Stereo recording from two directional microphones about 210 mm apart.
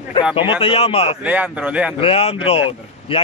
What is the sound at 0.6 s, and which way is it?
Speech, 25° left (ahead or behind).